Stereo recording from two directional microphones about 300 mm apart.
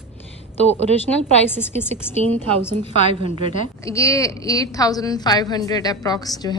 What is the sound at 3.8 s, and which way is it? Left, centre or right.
A woman's voice, centre.